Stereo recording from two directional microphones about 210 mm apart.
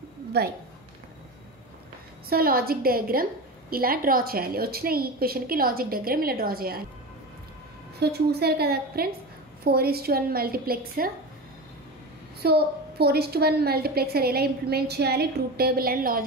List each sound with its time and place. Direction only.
0.3 s a woman's voice: 50° right (ahead or behind)
2.2 s a woman's voice: 45° right (ahead or behind)
8.0 s a woman's voice: 50° right (ahead or behind)
12.4 s a woman's voice: 50° right (ahead or behind)